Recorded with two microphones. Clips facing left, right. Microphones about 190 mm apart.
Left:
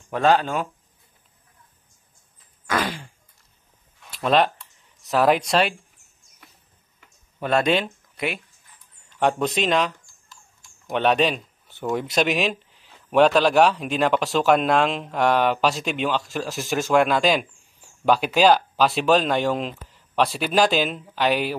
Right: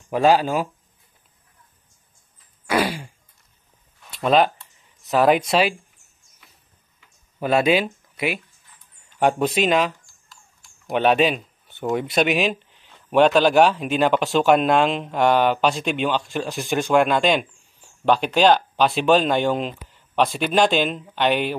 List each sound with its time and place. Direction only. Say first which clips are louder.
0.1 s speech: right 2 dB; 10° right (ahead or behind)
2.6 s a sound: right 4 dB; 10° right (ahead or behind)
4.1 s speech: right 2 dB; centre (ahead or behind)
7.3 s speech: right 2 dB; 5° right (ahead or behind)